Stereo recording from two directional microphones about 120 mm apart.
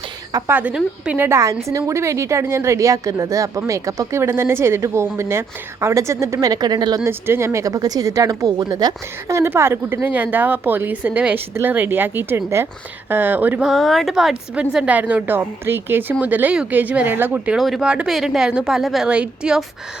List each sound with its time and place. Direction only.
0.5 s a woman's voice: 10° right (ahead or behind); by 7.0 s 35° right (ahead or behind)
7.0 s a woman's voice: 20° right (ahead or behind)
9.3 s speech: 20° right (ahead or behind)
13.7 s speech: centre (ahead or behind)